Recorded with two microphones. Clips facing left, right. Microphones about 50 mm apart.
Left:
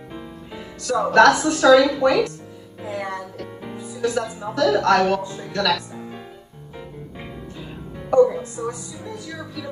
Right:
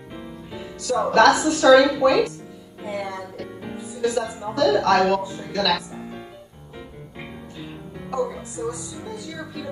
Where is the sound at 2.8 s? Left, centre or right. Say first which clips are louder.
Left 1 dB; left.